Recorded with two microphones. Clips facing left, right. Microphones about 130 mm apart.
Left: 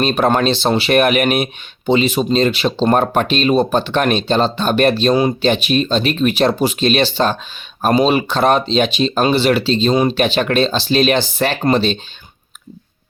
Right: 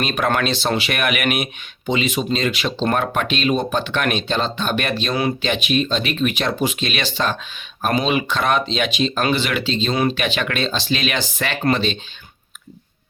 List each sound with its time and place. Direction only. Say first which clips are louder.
0.0 s speech: left 6 dB; 30° left (ahead or behind)